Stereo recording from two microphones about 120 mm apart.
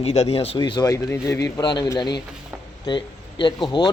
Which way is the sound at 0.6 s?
35° left (ahead or behind).